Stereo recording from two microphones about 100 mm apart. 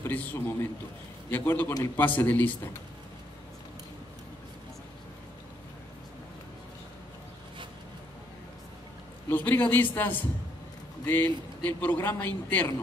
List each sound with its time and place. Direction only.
0.0 s a man's voice: 20° left (ahead or behind)
9.3 s a man's voice: 20° left (ahead or behind)